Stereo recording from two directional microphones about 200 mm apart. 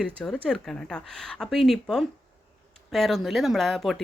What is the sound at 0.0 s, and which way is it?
Speech, 5° left (ahead or behind).